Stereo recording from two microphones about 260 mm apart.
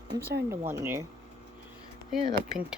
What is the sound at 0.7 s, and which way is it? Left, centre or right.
Speech, centre.